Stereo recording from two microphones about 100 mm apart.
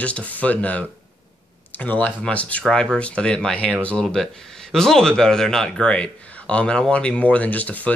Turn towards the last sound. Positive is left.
turn(degrees=15)  # may be behind; listen again after turning